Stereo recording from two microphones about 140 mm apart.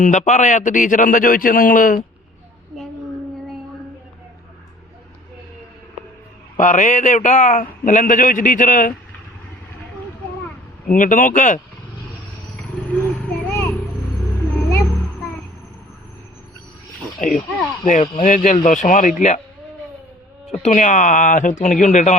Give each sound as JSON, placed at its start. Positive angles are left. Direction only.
{"t": 0.0, "sound": "a man's voice", "side_deg": 60}
{"t": 6.6, "sound": "a man's voice", "side_deg": 65}
{"t": 10.9, "sound": "a man's voice", "side_deg": 70}
{"t": 12.7, "sound": "vehicle", "side_deg": 5}
{"t": 14.7, "sound": "a sound", "side_deg": 20}
{"t": 17.2, "sound": "a man's voice", "side_deg": 65}
{"t": 20.5, "sound": "a man's voice", "side_deg": 55}